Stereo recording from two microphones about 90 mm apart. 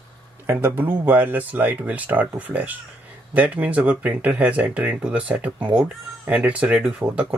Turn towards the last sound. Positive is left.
turn(degrees=-15)  # may be behind; listen again after turning